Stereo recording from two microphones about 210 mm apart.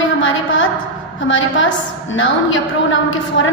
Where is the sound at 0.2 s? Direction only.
70° left (ahead or behind).